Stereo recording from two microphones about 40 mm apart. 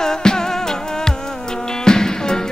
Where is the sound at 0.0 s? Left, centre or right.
Centre.